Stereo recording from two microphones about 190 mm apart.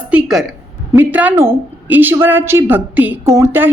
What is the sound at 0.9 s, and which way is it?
A woman's voice, 10° right (ahead or behind).